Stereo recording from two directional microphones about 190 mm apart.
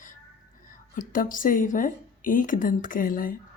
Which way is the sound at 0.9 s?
45° left (ahead or behind).